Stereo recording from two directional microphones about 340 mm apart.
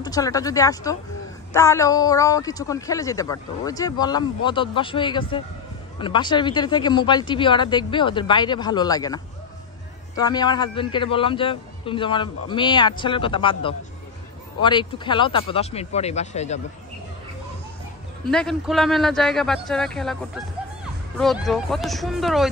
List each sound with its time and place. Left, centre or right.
0.0 s speech: centre
18.2 s a man's voice: centre
21.2 s a man's voice: centre